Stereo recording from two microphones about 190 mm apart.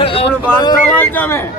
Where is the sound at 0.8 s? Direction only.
10° left (ahead or behind).